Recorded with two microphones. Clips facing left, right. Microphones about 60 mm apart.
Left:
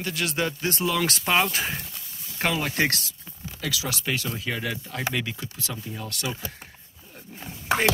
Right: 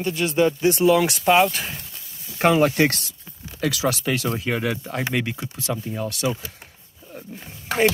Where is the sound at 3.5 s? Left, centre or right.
Right.